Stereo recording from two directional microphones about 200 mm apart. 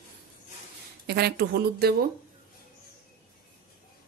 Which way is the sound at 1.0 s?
55° right (ahead or behind).